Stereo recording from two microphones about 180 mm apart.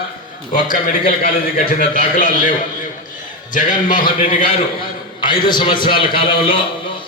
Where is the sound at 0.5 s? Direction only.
45° left (ahead or behind).